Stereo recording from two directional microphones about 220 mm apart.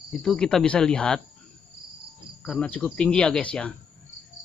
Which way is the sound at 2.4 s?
5° left (ahead or behind).